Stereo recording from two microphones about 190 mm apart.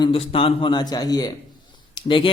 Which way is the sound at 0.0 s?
30° left (ahead or behind).